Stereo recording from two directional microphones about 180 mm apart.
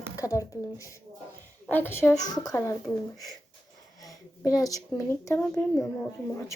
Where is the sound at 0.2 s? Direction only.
20° left (ahead or behind).